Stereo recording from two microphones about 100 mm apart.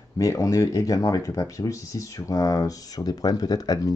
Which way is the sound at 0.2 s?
35° left (ahead or behind).